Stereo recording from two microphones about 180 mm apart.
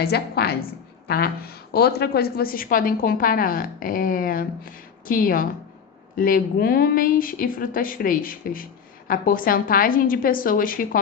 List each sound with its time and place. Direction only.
0.0 s a woman's voice: 60° left (ahead or behind)